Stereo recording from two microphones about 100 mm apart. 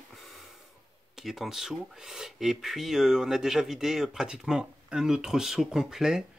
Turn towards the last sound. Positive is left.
turn(degrees=-5)  # may be behind; listen again after turning